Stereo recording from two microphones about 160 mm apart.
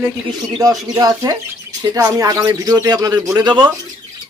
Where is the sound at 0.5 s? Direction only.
25° right (ahead or behind).